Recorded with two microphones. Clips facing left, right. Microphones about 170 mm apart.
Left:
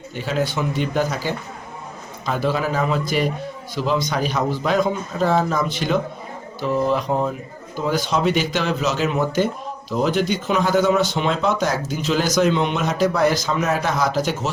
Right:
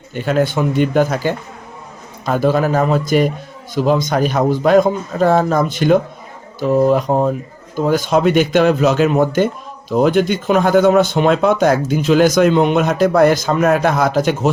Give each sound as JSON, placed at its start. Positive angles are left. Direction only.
{"t": 0.1, "sound": "speech", "side_deg": -55}